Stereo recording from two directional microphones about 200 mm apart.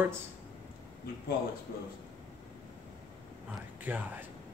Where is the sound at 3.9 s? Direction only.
10° right (ahead or behind).